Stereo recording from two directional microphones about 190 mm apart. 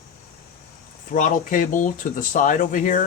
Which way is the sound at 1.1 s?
45° left (ahead or behind).